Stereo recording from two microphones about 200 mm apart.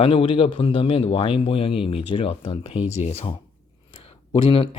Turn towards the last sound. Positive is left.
turn(degrees=25)  # may be behind; listen again after turning